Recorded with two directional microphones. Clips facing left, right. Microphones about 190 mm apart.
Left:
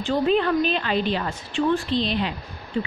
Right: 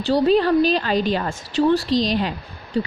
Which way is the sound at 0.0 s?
35° right (ahead or behind).